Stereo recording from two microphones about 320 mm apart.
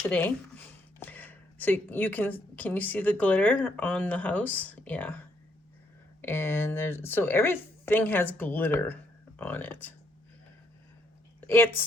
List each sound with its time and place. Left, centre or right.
0.1 s speech: centre
6.2 s speech: centre
11.4 s speech: centre